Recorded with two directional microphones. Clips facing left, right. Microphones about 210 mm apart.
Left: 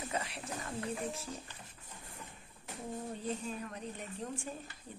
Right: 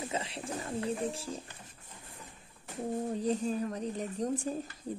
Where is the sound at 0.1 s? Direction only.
25° right (ahead or behind).